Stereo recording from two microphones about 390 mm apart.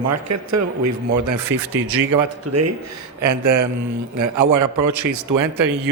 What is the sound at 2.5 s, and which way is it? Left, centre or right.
A man's voice, right.